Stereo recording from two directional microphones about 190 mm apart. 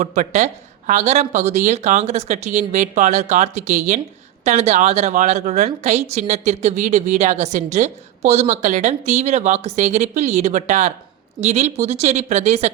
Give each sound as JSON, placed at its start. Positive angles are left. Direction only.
{"t": 0.0, "sound": "a woman's voice", "side_deg": -40}